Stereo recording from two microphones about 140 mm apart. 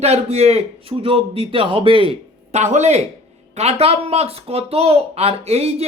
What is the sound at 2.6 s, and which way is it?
Speech, 55° right (ahead or behind).